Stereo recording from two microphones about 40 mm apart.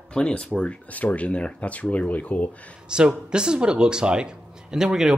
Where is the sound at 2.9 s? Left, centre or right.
Right.